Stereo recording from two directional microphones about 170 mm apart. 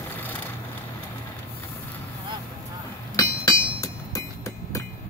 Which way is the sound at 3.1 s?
20° left (ahead or behind).